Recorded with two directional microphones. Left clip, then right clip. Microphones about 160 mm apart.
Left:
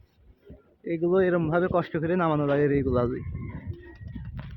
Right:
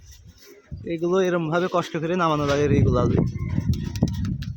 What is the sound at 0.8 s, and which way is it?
Speech, 5° right (ahead or behind).